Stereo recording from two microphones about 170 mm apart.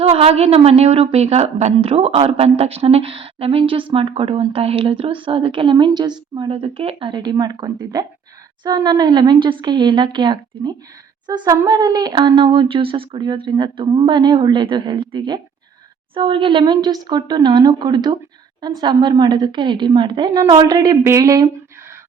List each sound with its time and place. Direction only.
0.0 s a woman's voice: 35° right (ahead or behind); by 21.5 s 20° right (ahead or behind)